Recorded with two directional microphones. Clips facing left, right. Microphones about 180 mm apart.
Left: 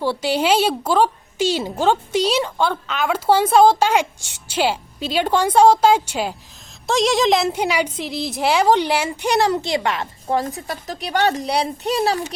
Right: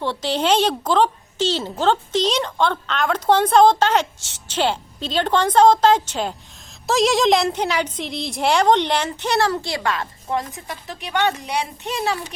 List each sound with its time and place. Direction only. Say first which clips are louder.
0.0 s a woman's voice: left 2 dB; 10° left (ahead or behind); by 10.4 s 30° left (ahead or behind)
10.4 s speech: left 6 dB; 40° left (ahead or behind)